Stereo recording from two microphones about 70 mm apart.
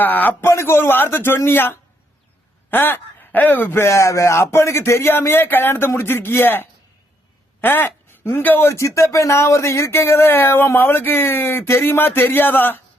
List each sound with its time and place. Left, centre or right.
0.0 s a man's voice: left